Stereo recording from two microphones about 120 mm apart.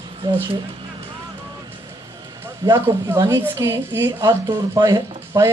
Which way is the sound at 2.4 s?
25° right (ahead or behind).